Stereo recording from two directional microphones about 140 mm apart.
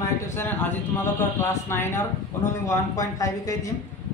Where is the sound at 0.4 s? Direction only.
15° left (ahead or behind).